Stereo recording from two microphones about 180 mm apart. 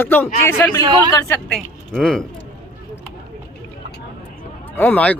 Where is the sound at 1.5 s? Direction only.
Centre (ahead or behind).